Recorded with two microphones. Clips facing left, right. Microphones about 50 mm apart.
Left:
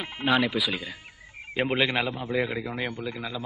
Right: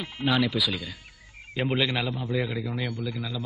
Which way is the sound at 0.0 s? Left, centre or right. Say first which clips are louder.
Left 1 dB; left.